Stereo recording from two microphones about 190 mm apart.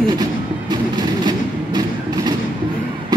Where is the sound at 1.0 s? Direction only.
20° right (ahead or behind).